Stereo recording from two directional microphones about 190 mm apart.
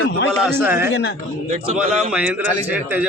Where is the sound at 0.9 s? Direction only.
70° left (ahead or behind).